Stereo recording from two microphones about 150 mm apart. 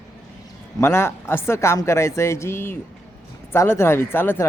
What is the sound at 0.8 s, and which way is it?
A man's voice, 15° left (ahead or behind).